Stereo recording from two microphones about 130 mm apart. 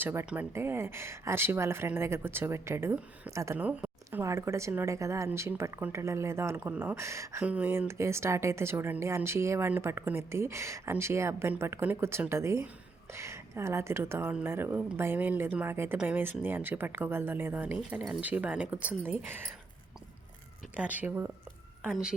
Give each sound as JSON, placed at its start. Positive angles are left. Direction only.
{"t": 0.0, "sound": "speech", "side_deg": -20}
{"t": 3.6, "sound": "speech", "side_deg": -10}
{"t": 7.4, "sound": "speech", "side_deg": -10}
{"t": 20.7, "sound": "speech", "side_deg": -10}